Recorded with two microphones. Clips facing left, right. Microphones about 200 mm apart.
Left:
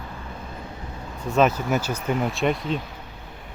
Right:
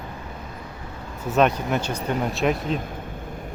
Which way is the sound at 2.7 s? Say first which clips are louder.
Right 3 dB; 50° right (ahead or behind).